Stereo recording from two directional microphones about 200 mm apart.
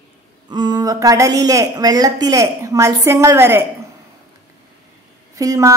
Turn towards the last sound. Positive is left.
turn(degrees=-15)  # may be behind; listen again after turning